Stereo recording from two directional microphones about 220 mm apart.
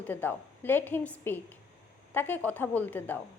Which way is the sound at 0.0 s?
10° left (ahead or behind).